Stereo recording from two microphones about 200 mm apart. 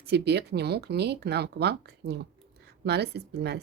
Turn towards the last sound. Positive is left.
turn(degrees=-55)  # may be behind; listen again after turning